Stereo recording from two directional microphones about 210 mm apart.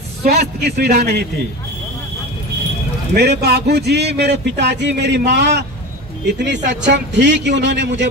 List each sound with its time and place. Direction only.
0.2 s speech: 50° right (ahead or behind)
3.2 s a man's voice: 50° right (ahead or behind)